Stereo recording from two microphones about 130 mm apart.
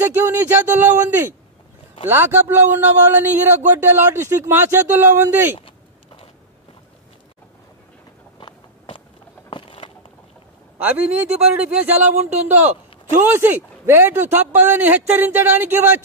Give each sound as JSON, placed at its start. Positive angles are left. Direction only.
{"t": 0.0, "sound": "a man's voice", "side_deg": -15}
{"t": 8.4, "sound": "walk", "side_deg": 40}
{"t": 9.5, "sound": "a sound", "side_deg": 40}
{"t": 10.8, "sound": "a man's voice", "side_deg": -10}
{"t": 13.1, "sound": "a man's voice", "side_deg": -15}